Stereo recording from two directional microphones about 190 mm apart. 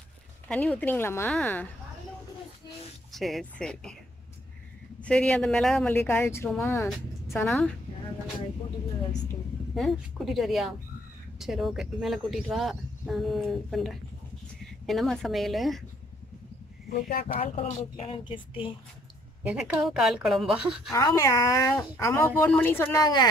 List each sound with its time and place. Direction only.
0.5 s speech: 5° left (ahead or behind)
3.1 s speech: centre (ahead or behind)
5.0 s speech: 5° left (ahead or behind)
9.8 s speech: centre (ahead or behind)
16.9 s speech: 50° left (ahead or behind)
17.4 s speech: 35° left (ahead or behind)
19.4 s speech: 5° right (ahead or behind)
20.9 s speech: 15° left (ahead or behind)